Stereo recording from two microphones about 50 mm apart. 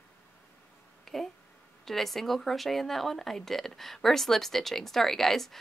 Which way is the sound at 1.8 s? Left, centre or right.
Centre.